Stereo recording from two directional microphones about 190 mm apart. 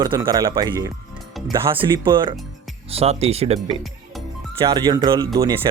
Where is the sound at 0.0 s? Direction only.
20° right (ahead or behind).